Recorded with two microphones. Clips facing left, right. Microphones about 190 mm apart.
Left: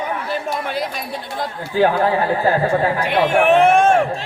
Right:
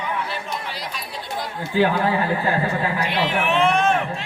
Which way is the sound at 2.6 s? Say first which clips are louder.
Left 6 dB; 50° left (ahead or behind).